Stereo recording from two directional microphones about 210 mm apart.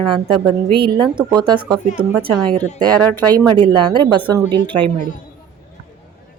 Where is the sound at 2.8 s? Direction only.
5° left (ahead or behind).